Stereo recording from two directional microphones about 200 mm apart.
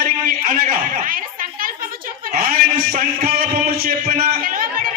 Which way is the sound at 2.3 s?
50° right (ahead or behind).